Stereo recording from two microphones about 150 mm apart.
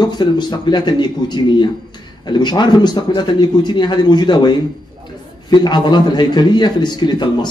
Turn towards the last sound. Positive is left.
turn(degrees=30)  # may be behind; listen again after turning